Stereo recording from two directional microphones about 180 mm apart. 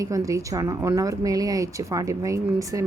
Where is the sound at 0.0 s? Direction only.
20° right (ahead or behind).